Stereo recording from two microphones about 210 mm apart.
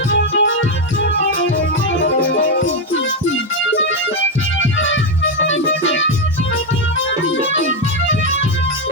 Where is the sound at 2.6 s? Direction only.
65° left (ahead or behind).